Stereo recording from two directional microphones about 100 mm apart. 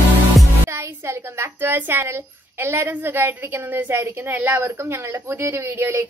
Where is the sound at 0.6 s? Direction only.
25° right (ahead or behind).